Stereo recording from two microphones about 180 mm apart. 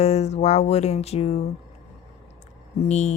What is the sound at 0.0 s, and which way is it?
Speech, 40° left (ahead or behind).